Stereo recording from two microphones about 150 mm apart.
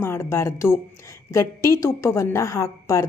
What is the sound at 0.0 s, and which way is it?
A woman's voice, 20° left (ahead or behind).